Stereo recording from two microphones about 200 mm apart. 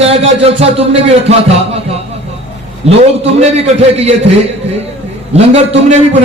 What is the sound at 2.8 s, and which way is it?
A man's voice, 30° right (ahead or behind).